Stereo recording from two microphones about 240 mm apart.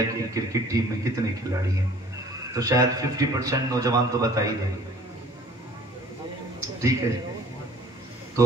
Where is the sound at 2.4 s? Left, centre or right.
Centre.